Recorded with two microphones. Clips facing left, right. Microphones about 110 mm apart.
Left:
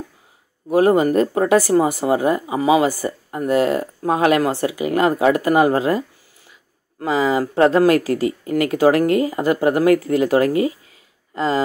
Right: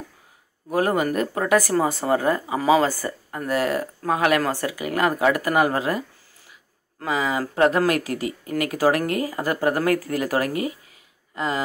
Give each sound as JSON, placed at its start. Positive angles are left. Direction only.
{"t": 0.7, "sound": "speech", "side_deg": 20}